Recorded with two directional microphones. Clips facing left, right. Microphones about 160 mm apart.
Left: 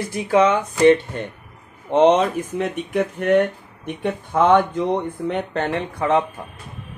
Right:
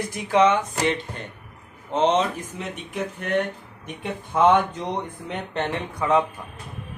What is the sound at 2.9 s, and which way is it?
Speech, 55° left (ahead or behind).